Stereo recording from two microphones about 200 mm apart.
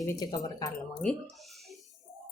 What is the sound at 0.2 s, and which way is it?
Speech, 20° left (ahead or behind).